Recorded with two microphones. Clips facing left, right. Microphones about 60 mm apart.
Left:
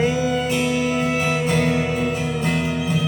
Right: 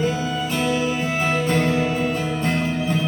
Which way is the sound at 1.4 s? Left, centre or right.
Centre.